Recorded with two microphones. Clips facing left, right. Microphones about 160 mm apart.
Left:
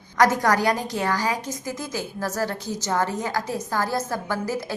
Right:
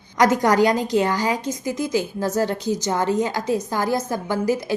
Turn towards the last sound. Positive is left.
turn(degrees=-15)  # may be behind; listen again after turning